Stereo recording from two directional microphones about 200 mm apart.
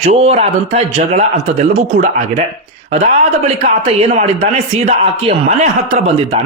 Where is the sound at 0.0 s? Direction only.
30° right (ahead or behind).